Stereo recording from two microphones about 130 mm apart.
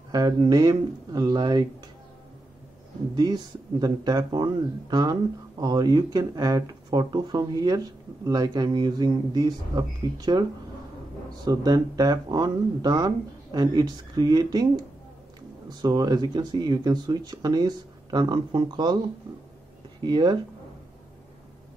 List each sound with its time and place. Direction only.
0.1 s speech: 30° right (ahead or behind)
3.2 s speech: 30° right (ahead or behind)
11.4 s speech: 30° right (ahead or behind)
15.7 s speech: 30° right (ahead or behind)
20.0 s speech: 35° right (ahead or behind)